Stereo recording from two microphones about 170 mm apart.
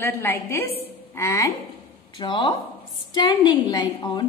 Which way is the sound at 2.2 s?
30° left (ahead or behind).